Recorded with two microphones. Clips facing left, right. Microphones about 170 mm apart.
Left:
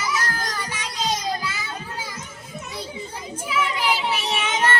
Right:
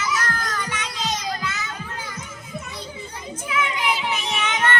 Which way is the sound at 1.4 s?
10° left (ahead or behind).